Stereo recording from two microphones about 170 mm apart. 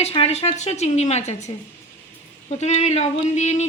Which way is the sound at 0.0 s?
35° left (ahead or behind).